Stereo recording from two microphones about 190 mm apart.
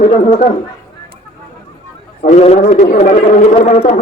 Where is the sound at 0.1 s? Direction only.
40° left (ahead or behind).